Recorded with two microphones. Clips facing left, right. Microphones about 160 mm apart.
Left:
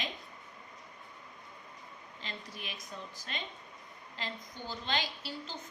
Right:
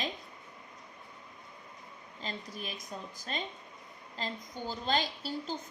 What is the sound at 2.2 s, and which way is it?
Speech, 40° right (ahead or behind).